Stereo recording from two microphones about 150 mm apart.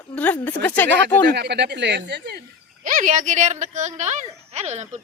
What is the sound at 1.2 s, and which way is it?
Speech, 90° right.